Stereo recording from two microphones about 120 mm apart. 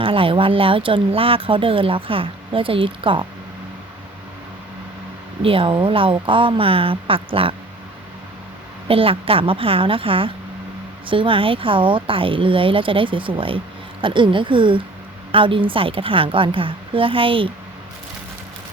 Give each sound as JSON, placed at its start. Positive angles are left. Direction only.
{"t": 0.0, "sound": "speech", "side_deg": -50}
{"t": 5.4, "sound": "speech", "side_deg": -50}
{"t": 8.9, "sound": "speech", "side_deg": -50}